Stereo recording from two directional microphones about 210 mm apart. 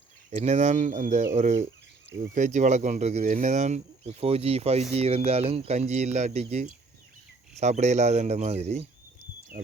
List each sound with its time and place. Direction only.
0.3 s speech: 30° right (ahead or behind)